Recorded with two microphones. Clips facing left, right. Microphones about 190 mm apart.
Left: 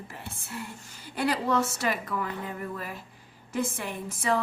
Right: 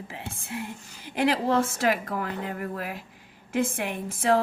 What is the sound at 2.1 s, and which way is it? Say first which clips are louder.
Speech: right 2 dB; 60° right (ahead or behind).